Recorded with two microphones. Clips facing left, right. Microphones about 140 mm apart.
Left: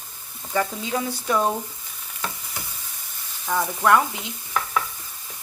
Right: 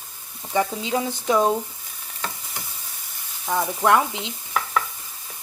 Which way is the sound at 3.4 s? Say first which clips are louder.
Even; 15° right (ahead or behind).